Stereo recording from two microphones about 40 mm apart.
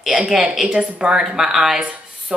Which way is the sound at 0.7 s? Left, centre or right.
Right.